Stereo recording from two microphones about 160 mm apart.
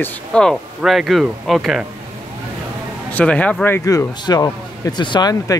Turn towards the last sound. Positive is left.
turn(degrees=25)  # may be behind; listen again after turning